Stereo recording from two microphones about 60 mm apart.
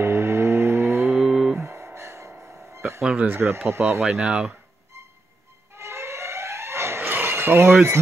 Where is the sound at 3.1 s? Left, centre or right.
Right.